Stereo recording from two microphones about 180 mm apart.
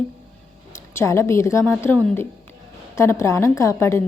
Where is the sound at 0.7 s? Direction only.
15° left (ahead or behind).